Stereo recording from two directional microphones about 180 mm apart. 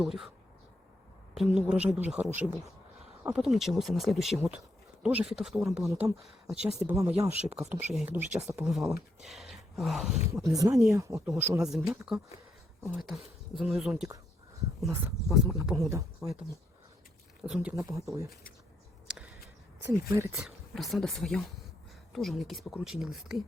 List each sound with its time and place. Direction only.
0.0 s speech: centre (ahead or behind)
1.4 s speech: 5° right (ahead or behind)
10.4 s speech: 20° right (ahead or behind); by 14.1 s 5° right (ahead or behind)
15.3 s speech: centre (ahead or behind)
17.9 s speech: 20° right (ahead or behind)
19.0 s a sound: 5° right (ahead or behind)
19.8 s speech: 15° right (ahead or behind)
20.3 s speech: centre (ahead or behind)